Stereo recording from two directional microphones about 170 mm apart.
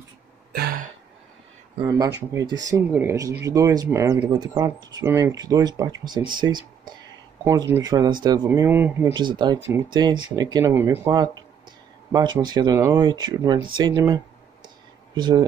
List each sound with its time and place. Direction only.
0.5 s throat clearing: 65° right (ahead or behind)
1.8 s speech: 20° right (ahead or behind)
8.5 s speech: 15° right (ahead or behind)
9.1 s speech: 25° right (ahead or behind)
12.1 s speech: 25° right (ahead or behind)
13.4 s speech: 15° right (ahead or behind)